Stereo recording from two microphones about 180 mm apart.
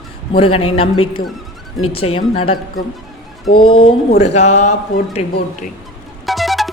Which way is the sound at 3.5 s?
30° left (ahead or behind).